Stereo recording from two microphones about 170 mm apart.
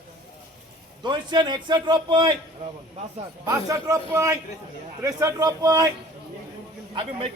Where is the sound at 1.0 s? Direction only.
25° right (ahead or behind).